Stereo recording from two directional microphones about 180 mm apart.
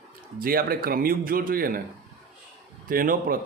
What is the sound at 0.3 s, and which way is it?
Speech, 55° right (ahead or behind).